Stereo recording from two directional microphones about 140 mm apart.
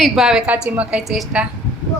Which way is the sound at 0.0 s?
5° right (ahead or behind).